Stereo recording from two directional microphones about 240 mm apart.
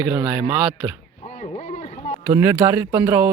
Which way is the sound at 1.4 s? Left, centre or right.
Left.